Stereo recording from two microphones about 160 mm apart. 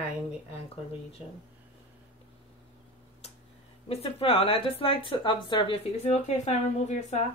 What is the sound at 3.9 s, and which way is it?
Speech, 35° left (ahead or behind).